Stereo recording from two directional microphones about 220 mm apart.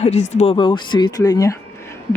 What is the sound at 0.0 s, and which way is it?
Speech, 30° left (ahead or behind).